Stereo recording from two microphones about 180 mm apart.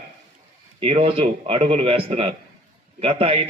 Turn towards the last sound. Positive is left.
turn(degrees=-30)  # may be behind; listen again after turning